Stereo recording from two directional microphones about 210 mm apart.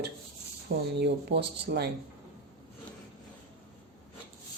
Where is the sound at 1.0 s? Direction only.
55° right (ahead or behind).